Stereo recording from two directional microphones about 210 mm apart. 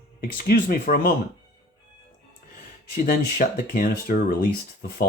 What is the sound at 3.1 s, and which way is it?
Speech, 40° left (ahead or behind).